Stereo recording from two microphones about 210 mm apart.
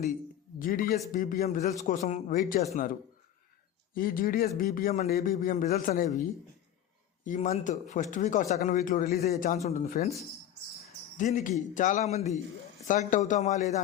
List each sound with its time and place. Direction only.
0.6 s a man's voice: 40° left (ahead or behind)
3.9 s a man's voice: 45° left (ahead or behind)
7.3 s a man's voice: 35° left (ahead or behind)
11.2 s a man's voice: 35° left (ahead or behind)